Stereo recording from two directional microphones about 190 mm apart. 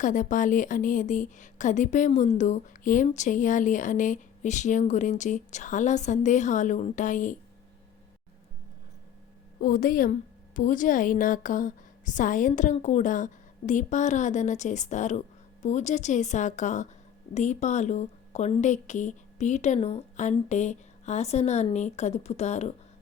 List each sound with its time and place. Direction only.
0.0 s speech: 40° left (ahead or behind)
9.6 s a woman's voice: 45° left (ahead or behind)